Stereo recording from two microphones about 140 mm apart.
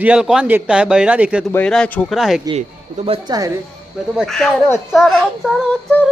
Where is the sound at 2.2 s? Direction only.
Centre (ahead or behind).